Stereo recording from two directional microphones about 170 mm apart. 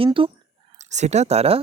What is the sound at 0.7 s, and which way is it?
Speech, 45° right (ahead or behind).